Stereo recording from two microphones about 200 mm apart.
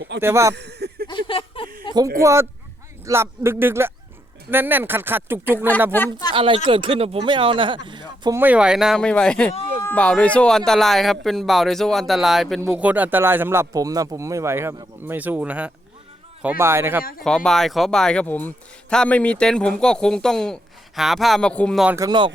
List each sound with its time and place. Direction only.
0.2 s speech: 15° right (ahead or behind)
0.5 s a sound: 55° right (ahead or behind)
1.0 s a sound: 25° left (ahead or behind)
2.1 s speech: 15° right (ahead or behind)
5.5 s speech: 10° left (ahead or behind)
6.3 s speech: 25° right (ahead or behind)
7.9 s a sound: 20° right (ahead or behind)
8.4 s speech: 5° right (ahead or behind)
17.0 s speech: 45° left (ahead or behind)
17.2 s speech: 5° left (ahead or behind)
21.9 s speech: 20° right (ahead or behind)